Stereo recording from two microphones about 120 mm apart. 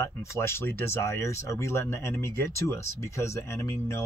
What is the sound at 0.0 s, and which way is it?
Speech, 20° left (ahead or behind).